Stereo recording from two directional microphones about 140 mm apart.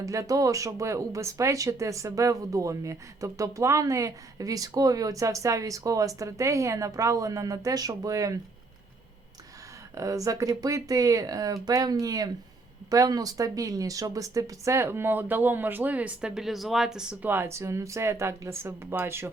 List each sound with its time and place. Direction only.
0.0 s speech: 25° right (ahead or behind)
9.9 s speech: 25° right (ahead or behind)